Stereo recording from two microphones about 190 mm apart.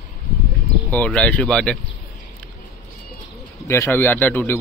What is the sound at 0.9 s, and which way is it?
Speech, 5° left (ahead or behind).